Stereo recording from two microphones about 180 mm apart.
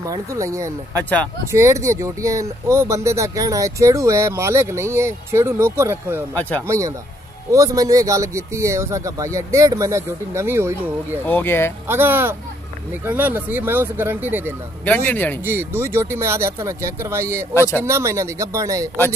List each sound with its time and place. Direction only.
0.0 s speech: 15° right (ahead or behind)
7.5 s speech: 20° right (ahead or behind)
11.2 s speech: 10° left (ahead or behind)
11.9 s speech: 10° right (ahead or behind)
14.9 s speech: 10° left (ahead or behind)
15.4 s speech: 10° right (ahead or behind)
17.6 s speech: 15° left (ahead or behind)
17.8 s speech: 15° right (ahead or behind)